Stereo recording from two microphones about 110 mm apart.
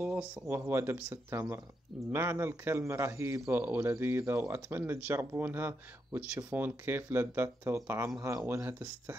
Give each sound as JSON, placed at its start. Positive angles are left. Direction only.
{"t": 0.0, "sound": "a man's voice", "side_deg": -15}